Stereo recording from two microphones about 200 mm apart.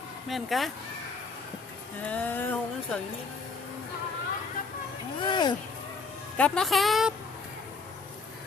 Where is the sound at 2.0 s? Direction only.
5° left (ahead or behind).